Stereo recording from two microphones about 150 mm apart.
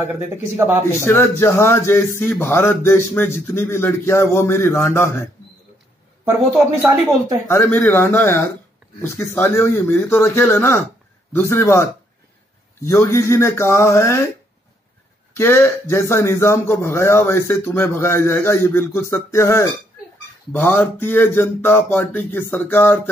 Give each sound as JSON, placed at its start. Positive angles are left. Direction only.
{"t": 0.1, "sound": "speech", "side_deg": -15}
{"t": 1.0, "sound": "speech", "side_deg": 15}
{"t": 6.2, "sound": "speech", "side_deg": -20}
{"t": 7.4, "sound": "speech", "side_deg": 15}
{"t": 15.3, "sound": "speech", "side_deg": 15}